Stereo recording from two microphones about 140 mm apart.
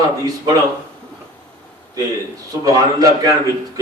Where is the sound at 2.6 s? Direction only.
30° right (ahead or behind).